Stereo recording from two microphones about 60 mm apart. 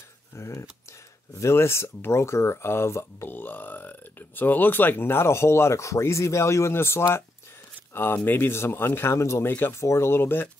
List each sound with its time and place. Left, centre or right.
0.4 s speech: left
3.3 s speech: left